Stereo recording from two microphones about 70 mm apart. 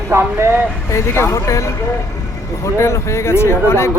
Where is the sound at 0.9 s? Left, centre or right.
Left.